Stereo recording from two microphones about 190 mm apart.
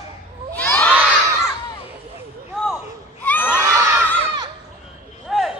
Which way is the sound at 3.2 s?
10° left (ahead or behind).